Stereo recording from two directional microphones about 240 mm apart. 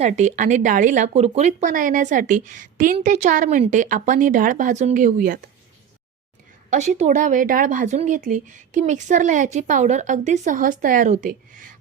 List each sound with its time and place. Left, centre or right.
0.0 s speech: right
6.7 s speech: right